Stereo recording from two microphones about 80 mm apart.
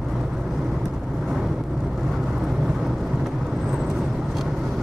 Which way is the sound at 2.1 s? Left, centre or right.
Centre.